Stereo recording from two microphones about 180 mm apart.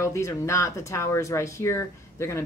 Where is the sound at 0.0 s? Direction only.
15° left (ahead or behind).